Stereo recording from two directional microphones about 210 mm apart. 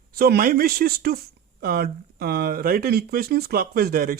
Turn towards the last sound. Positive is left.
turn(degrees=-45)  # may be behind; listen again after turning